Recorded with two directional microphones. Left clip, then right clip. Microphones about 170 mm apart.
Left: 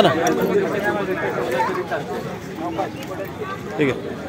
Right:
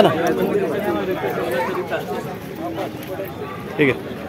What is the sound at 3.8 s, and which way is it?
Speech, 20° right (ahead or behind).